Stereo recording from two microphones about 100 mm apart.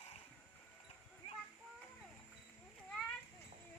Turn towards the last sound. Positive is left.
turn(degrees=5)  # may be behind; listen again after turning